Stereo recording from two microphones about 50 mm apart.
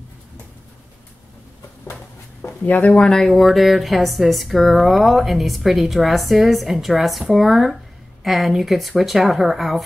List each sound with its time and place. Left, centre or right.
2.6 s speech: left
2.9 s speech: centre